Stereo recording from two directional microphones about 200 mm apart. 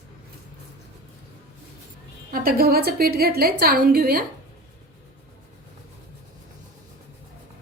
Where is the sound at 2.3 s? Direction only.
50° right (ahead or behind).